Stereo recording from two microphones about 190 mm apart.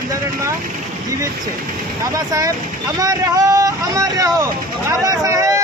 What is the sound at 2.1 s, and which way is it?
Speech, 15° right (ahead or behind).